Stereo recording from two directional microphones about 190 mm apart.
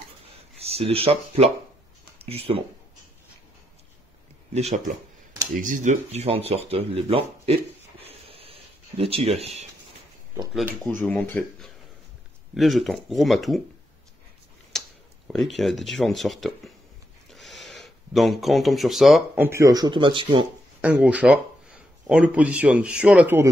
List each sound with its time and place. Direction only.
0.6 s speech: 30° right (ahead or behind)
4.6 s speech: 35° right (ahead or behind)
8.0 s a sound: 30° right (ahead or behind)
10.5 s speech: centre (ahead or behind)
11.0 s speech: 10° left (ahead or behind)
14.7 s tick-tock: centre (ahead or behind)
15.2 s speech: centre (ahead or behind); by 20.4 s 25° right (ahead or behind)
20.8 s speech: 5° right (ahead or behind)